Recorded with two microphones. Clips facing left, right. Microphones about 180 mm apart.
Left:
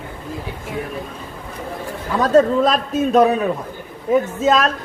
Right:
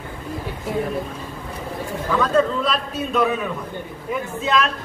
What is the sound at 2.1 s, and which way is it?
A man's voice, 40° left (ahead or behind).